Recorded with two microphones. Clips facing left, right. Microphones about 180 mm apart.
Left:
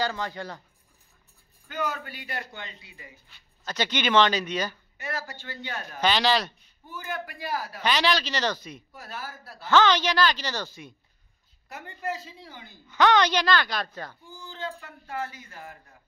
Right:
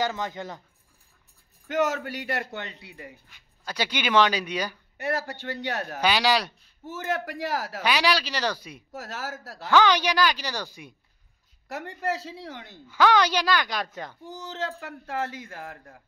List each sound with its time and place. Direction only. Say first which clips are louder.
0.0 s speech: right 1 dB; 20° right (ahead or behind)
1.7 s speech: right 6 dB; 90° right
2.4 s a man's voice: right 5 dB; 65° right (ahead or behind)
3.6 s a woman's voice: left 1 dB; 10° right (ahead or behind)
4.9 s a man's voice: right 6 dB; 60° right (ahead or behind)
5.9 s a woman's voice: even; 10° right (ahead or behind)
6.8 s a man's voice: right 5 dB; 90° right
7.8 s a woman's voice: even; 10° right (ahead or behind)
8.9 s a man's voice: right 6 dB; 90° right
9.7 s a woman's voice: even; 10° right (ahead or behind)
11.7 s speech: right 4 dB; 80° right
12.8 s a woman's voice: even; 5° right (ahead or behind)
14.2 s speech: right 6 dB; 75° right (ahead or behind)